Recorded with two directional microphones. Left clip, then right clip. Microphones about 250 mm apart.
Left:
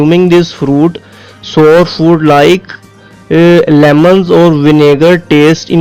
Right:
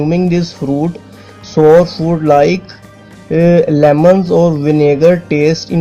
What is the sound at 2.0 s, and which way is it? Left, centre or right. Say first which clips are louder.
A man's voice: left 4 dB; left.